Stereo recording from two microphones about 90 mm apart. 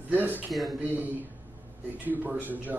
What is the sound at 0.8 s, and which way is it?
Speech, 20° right (ahead or behind).